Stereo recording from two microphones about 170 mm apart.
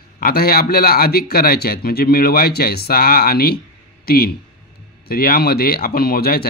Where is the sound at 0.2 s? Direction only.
60° left (ahead or behind).